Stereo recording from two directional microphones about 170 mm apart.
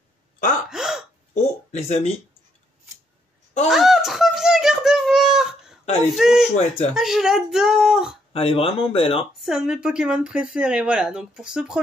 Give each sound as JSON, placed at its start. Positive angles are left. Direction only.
{"t": 0.7, "sound": "gasp", "side_deg": -5}
{"t": 1.3, "sound": "speech", "side_deg": 40}
{"t": 3.6, "sound": "a sound", "side_deg": 0}
{"t": 6.0, "sound": "speech", "side_deg": 0}
{"t": 8.3, "sound": "speech", "side_deg": 35}
{"t": 9.4, "sound": "speech", "side_deg": 0}